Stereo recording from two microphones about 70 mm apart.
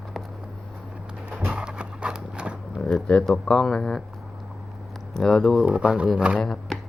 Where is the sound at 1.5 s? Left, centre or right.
Centre.